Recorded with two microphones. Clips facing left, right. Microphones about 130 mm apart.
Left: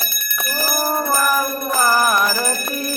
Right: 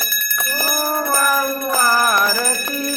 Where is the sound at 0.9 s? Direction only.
10° left (ahead or behind).